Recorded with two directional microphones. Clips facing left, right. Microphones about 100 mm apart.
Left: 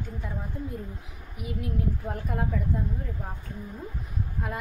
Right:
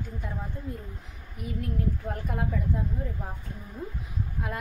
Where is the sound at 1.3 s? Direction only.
5° left (ahead or behind).